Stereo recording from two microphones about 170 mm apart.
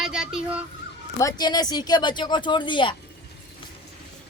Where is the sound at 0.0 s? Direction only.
5° right (ahead or behind).